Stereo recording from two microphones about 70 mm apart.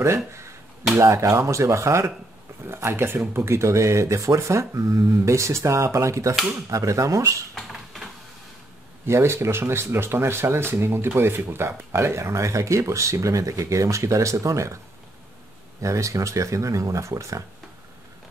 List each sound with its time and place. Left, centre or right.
0.0 s speech: right
7.5 s a sound: centre
9.0 s speech: right
15.8 s speech: right